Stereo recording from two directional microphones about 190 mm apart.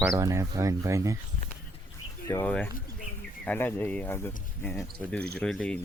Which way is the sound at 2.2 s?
10° left (ahead or behind).